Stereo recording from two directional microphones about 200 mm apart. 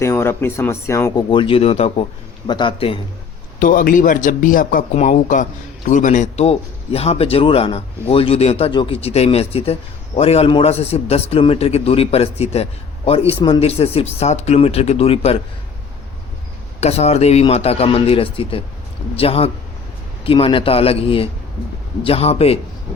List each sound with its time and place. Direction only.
0.0 s speech: 10° left (ahead or behind)
1.3 s a man's voice: 25° left (ahead or behind)
3.6 s a man's voice: 45° left (ahead or behind)
16.8 s a man's voice: 30° left (ahead or behind)